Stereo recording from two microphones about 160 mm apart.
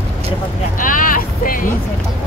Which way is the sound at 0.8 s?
60° left (ahead or behind).